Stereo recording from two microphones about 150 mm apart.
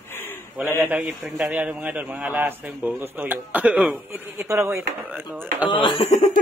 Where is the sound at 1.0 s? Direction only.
Centre (ahead or behind).